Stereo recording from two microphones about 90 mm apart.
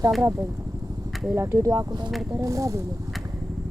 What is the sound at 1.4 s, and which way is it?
Speech, 35° right (ahead or behind).